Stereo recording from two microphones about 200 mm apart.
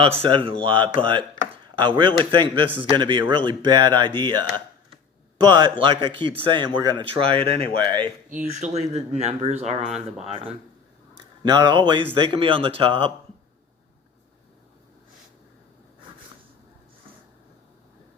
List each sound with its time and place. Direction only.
0.0 s speech: 30° right (ahead or behind)
8.3 s speech: 40° right (ahead or behind)